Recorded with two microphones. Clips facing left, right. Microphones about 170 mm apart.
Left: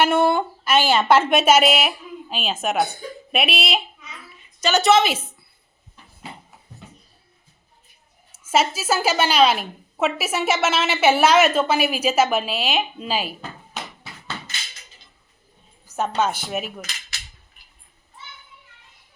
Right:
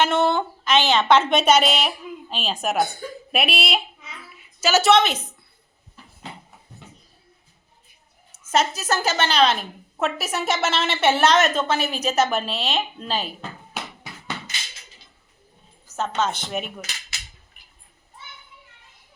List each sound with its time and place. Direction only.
0.0 s a woman's voice: 10° left (ahead or behind)
8.4 s a woman's voice: 5° left (ahead or behind)
14.0 s music: 15° right (ahead or behind)
15.9 s a woman's voice: 15° left (ahead or behind)